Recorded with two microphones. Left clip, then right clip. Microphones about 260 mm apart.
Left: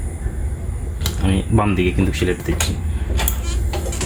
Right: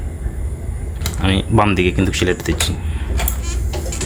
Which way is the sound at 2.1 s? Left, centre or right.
Right.